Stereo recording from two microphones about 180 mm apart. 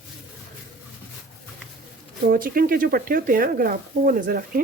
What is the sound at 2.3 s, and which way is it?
Speech, 50° right (ahead or behind).